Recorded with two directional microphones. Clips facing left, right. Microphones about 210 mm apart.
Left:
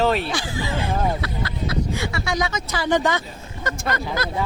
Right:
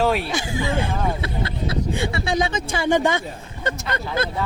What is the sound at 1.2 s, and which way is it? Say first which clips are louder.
Speech: right 1 dB; 25° right (ahead or behind).